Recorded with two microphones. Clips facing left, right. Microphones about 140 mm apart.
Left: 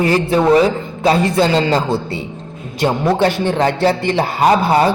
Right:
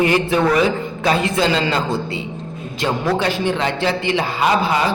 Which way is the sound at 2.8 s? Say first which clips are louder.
Left 4 dB; 25° left (ahead or behind).